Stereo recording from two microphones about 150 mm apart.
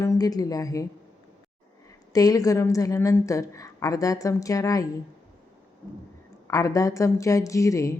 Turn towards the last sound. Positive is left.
turn(degrees=20)  # may be behind; listen again after turning